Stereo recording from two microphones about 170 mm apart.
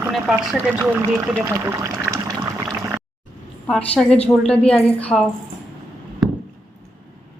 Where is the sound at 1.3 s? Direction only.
15° right (ahead or behind).